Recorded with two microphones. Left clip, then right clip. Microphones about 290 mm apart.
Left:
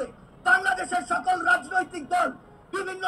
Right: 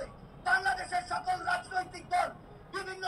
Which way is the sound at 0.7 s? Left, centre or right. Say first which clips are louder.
Left 7 dB; left.